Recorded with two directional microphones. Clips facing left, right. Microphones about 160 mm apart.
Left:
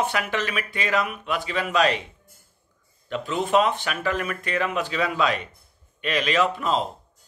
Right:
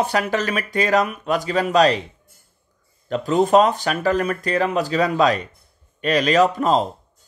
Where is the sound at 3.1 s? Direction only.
40° right (ahead or behind).